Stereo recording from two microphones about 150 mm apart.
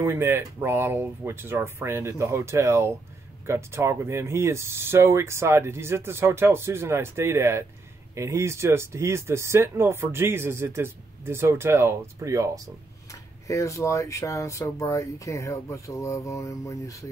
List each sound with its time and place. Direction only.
0.0 s speech: 15° right (ahead or behind)
13.1 s speech: 20° left (ahead or behind)